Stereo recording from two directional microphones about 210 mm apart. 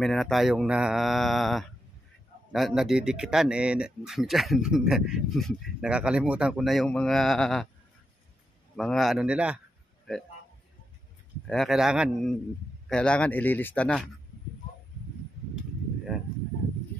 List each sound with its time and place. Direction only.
0.0 s speech: centre (ahead or behind)
8.7 s speech: centre (ahead or behind)
11.4 s speech: centre (ahead or behind)
16.1 s a sound: centre (ahead or behind)